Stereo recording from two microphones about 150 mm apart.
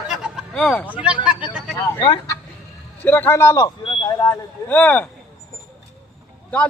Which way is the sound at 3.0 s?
10° left (ahead or behind).